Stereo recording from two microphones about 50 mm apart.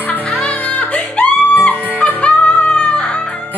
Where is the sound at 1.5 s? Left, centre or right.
Left; by 3.4 s centre.